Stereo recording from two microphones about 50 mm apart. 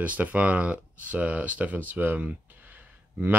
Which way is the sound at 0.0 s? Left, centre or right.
Right.